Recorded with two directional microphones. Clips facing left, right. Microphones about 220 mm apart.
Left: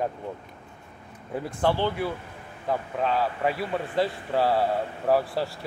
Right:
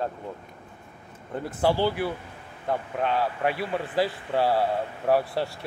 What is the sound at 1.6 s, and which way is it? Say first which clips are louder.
A man's voice: right 2 dB; 10° right (ahead or behind).